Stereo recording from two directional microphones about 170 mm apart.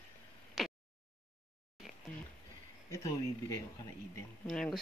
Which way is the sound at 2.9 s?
20° left (ahead or behind).